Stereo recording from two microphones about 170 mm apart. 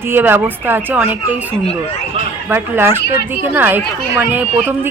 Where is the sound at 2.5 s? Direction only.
15° right (ahead or behind).